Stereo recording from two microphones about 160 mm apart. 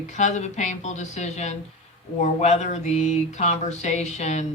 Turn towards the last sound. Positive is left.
turn(degrees=45)  # may be behind; listen again after turning